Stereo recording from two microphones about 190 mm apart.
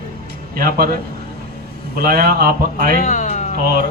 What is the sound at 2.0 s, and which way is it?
Speech, 55° right (ahead or behind).